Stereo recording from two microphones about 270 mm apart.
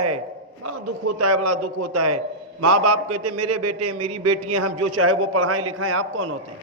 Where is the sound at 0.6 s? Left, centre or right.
Right.